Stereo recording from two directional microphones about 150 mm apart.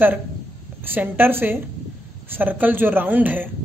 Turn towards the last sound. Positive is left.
turn(degrees=-10)  # may be behind; listen again after turning